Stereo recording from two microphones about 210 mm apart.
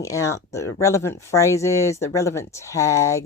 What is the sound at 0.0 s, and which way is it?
Speech, 15° left (ahead or behind).